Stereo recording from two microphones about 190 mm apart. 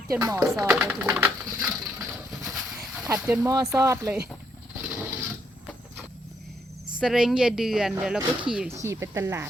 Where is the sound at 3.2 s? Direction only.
5° right (ahead or behind).